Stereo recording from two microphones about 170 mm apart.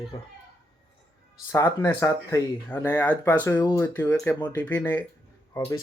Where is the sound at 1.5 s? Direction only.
15° left (ahead or behind).